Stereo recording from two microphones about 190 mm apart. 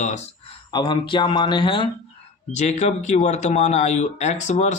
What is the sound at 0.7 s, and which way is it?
Speech, 25° left (ahead or behind).